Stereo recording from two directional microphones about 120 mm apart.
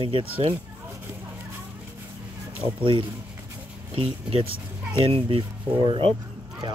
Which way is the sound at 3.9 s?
50° right (ahead or behind).